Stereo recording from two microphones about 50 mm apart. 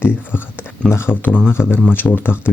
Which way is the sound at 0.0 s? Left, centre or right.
Left.